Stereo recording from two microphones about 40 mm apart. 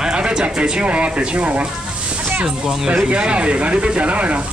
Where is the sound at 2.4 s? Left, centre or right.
Centre.